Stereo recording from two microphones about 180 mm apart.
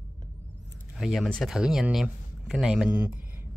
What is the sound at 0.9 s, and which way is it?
Speech, centre (ahead or behind).